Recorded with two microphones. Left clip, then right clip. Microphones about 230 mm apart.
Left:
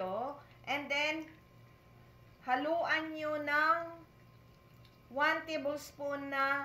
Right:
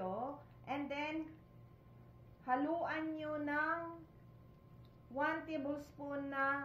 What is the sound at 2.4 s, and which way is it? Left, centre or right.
A woman's voice, left.